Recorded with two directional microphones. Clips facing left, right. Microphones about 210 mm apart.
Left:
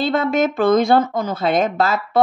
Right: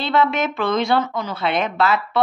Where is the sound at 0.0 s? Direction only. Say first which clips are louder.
Left 2 dB; 45° left (ahead or behind).